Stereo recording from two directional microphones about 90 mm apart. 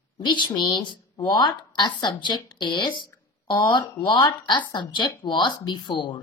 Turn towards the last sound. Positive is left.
turn(degrees=60)  # may be behind; listen again after turning